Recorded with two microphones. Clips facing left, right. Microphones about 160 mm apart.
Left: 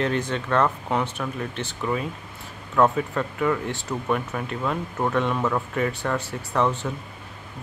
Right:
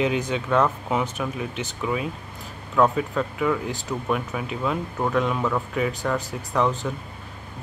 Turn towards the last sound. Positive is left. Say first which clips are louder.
# even
turn(degrees=0)  # may be behind; listen again after turning